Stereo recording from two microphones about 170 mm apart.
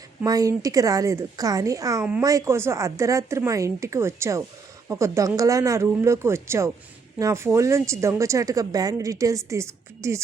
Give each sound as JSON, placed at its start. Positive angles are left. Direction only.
{"t": 0.3, "sound": "a woman's voice", "side_deg": -20}